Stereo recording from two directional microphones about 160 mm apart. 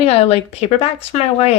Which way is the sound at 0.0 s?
40° left (ahead or behind).